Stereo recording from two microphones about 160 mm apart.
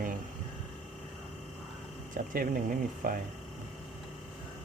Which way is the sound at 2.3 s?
60° right (ahead or behind).